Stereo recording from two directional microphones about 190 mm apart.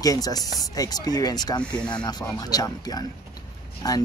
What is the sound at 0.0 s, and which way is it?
Speech, 20° left (ahead or behind).